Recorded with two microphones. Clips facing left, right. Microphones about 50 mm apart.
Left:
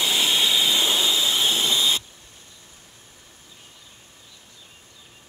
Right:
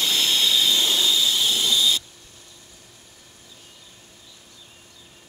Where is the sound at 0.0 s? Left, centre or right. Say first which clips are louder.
Left 1 dB; centre.